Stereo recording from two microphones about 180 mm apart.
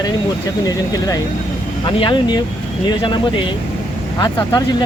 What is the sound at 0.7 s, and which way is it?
Speech, 20° left (ahead or behind).